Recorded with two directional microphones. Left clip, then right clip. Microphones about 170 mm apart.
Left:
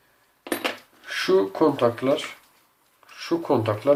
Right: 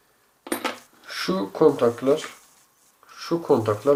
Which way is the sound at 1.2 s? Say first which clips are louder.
Even; 30° right (ahead or behind).